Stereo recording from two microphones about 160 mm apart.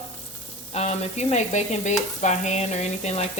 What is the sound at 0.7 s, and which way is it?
Speech, 45° left (ahead or behind).